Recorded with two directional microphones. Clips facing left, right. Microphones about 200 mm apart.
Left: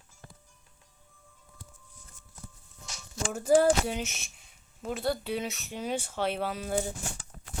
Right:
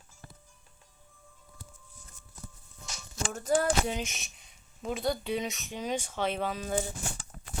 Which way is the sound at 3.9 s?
5° left (ahead or behind).